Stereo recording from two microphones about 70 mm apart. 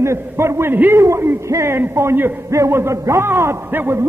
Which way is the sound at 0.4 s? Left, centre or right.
Right.